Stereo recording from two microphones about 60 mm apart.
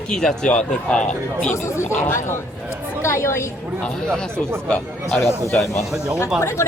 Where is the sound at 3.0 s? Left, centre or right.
Left.